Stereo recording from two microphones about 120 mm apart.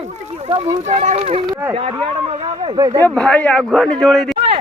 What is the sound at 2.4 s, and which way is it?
Speech, 60° right (ahead or behind).